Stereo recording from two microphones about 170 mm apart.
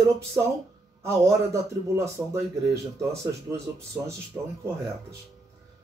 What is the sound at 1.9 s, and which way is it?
Speech, 15° right (ahead or behind).